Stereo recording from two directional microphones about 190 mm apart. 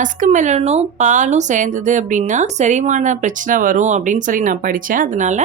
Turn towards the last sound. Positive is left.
turn(degrees=-40)  # may be behind; listen again after turning